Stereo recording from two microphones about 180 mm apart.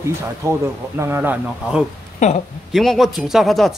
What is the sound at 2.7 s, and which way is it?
Speech, centre (ahead or behind).